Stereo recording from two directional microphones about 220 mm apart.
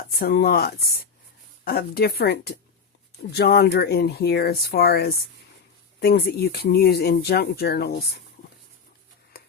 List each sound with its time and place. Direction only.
0.2 s speech: 45° left (ahead or behind)